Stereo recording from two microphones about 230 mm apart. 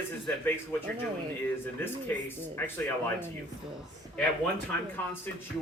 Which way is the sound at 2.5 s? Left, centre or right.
Centre.